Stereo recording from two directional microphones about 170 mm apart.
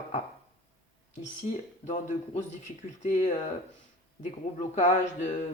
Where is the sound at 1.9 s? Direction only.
45° left (ahead or behind).